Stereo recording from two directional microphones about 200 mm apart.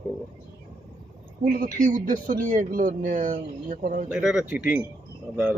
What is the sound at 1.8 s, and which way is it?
Speech, 40° right (ahead or behind).